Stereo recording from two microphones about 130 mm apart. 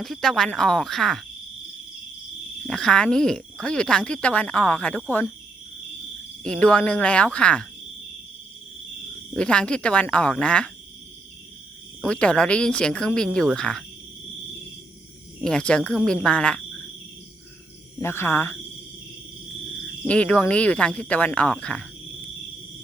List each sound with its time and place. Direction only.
0.0 s speech: centre (ahead or behind)
2.6 s speech: 5° left (ahead or behind)
6.6 s speech: 10° left (ahead or behind)
9.3 s speech: 5° left (ahead or behind)
12.0 s speech: 5° left (ahead or behind)
15.4 s speech: 5° left (ahead or behind)
18.0 s speech: 20° left (ahead or behind)
20.1 s speech: 10° left (ahead or behind)